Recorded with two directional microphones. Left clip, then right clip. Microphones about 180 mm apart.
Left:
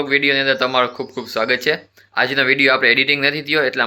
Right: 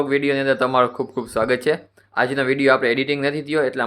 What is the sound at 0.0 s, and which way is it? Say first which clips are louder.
Speech: left 3 dB; 30° right (ahead or behind).